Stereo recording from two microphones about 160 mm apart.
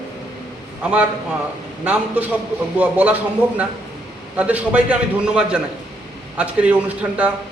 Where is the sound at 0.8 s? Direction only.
10° right (ahead or behind).